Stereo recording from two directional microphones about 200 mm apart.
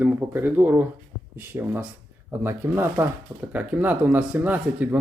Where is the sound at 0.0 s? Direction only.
10° right (ahead or behind).